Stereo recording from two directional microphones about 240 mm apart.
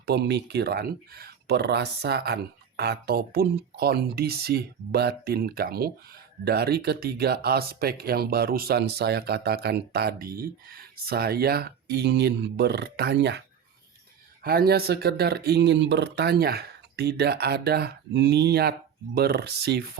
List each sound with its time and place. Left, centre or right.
0.0 s speech: right
14.4 s speech: right